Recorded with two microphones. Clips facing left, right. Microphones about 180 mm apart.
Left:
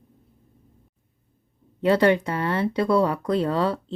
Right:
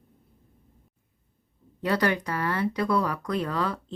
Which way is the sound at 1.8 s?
25° left (ahead or behind).